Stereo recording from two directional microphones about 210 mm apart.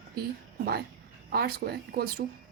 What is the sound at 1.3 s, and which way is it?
Speech, 45° right (ahead or behind).